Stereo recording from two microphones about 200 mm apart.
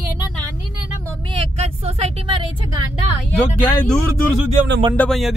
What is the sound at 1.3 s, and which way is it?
Speech, 30° right (ahead or behind).